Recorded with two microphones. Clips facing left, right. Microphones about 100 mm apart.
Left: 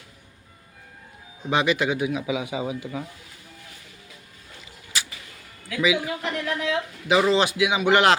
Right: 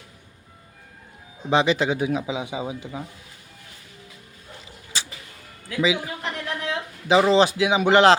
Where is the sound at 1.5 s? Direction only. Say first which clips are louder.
Right 2 dB; 30° right (ahead or behind).